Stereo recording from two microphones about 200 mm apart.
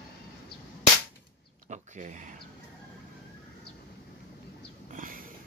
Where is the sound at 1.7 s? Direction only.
35° right (ahead or behind).